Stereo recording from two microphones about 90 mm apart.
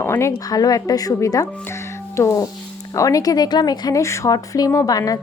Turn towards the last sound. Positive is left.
turn(degrees=45)  # may be behind; listen again after turning